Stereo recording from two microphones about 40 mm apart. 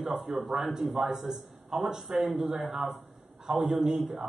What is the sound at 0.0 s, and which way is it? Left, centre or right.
A man's voice, centre.